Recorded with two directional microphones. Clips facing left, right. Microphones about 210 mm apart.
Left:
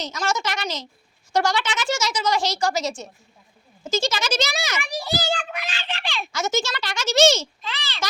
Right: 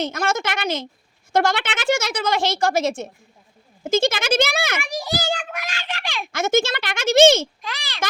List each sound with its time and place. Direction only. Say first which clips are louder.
0.0 s speech: right 3 dB; 55° right (ahead or behind)
4.8 s a child's voice: right 1 dB; 10° right (ahead or behind)
6.2 s speech: right 6 dB; 55° right (ahead or behind)
7.6 s a child's voice: right 1 dB; 10° right (ahead or behind)